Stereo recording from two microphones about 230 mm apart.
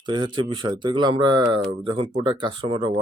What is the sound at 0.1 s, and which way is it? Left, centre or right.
Speech, centre.